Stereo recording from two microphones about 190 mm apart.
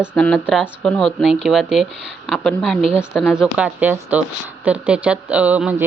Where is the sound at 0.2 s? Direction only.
5° left (ahead or behind).